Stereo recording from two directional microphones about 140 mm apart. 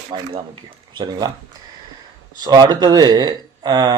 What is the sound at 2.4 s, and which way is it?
Speech, 30° right (ahead or behind).